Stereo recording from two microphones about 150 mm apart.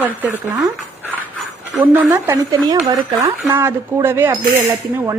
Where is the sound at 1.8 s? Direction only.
10° right (ahead or behind).